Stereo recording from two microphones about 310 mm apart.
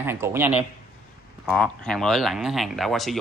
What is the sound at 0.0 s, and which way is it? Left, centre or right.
A man's voice, centre.